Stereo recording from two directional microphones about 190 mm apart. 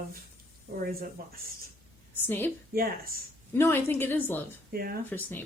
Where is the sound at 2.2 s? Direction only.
10° left (ahead or behind).